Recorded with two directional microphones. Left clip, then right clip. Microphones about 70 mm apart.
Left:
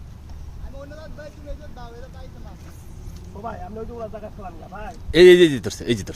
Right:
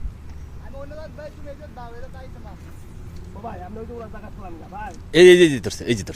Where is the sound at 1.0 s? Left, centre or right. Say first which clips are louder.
Right 3 dB; right.